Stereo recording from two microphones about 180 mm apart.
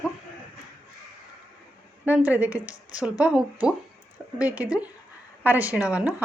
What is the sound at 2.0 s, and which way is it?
Speech, 10° right (ahead or behind).